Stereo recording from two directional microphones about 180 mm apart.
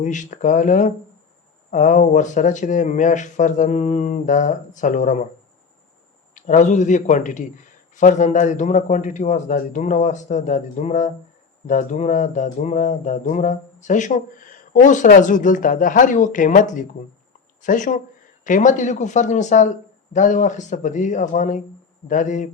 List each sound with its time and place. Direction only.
0.0 s speech: 45° left (ahead or behind)
6.3 s speech: 45° left (ahead or behind)